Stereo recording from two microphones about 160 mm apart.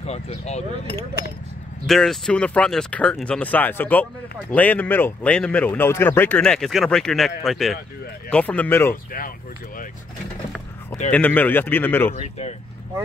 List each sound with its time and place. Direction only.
0.0 s speech: 40° left (ahead or behind)
1.9 s speech: centre (ahead or behind)
11.1 s speech: 10° left (ahead or behind)
12.2 s speech: 40° left (ahead or behind)